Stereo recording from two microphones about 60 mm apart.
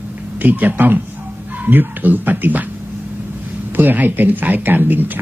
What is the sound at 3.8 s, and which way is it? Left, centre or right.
Speech, right.